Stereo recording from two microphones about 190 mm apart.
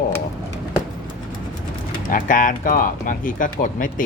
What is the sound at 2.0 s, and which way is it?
Speech, 45° left (ahead or behind).